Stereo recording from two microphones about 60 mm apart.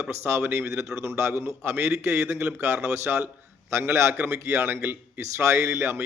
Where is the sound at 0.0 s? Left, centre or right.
Right.